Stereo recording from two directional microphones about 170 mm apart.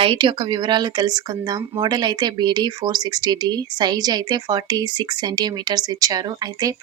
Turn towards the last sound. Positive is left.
turn(degrees=-25)  # may be behind; listen again after turning